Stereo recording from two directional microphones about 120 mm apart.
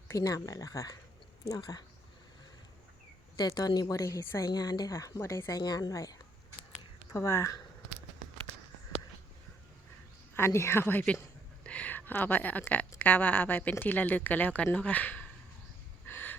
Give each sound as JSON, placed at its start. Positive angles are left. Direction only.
{"t": 0.1, "sound": "a woman's voice", "side_deg": 30}
{"t": 3.3, "sound": "a woman's voice", "side_deg": 30}
{"t": 4.4, "sound": "a woman's voice", "side_deg": 35}
{"t": 10.3, "sound": "a woman's voice", "side_deg": 20}
{"t": 16.0, "sound": "a sound", "side_deg": 15}